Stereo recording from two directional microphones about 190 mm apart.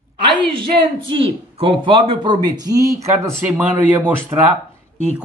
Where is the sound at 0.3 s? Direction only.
25° right (ahead or behind); by 4.0 s 10° right (ahead or behind).